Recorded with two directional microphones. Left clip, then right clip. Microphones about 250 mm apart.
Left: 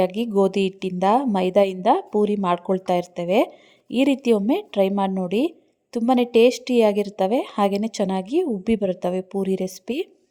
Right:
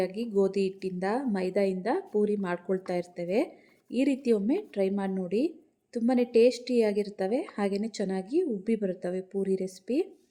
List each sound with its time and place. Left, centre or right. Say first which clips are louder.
0.0 s a woman's voice: left 8 dB; left